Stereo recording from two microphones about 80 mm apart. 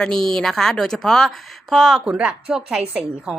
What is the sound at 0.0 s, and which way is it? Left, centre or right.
Speech, centre.